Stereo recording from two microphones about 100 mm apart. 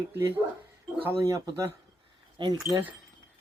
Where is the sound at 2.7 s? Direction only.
20° right (ahead or behind).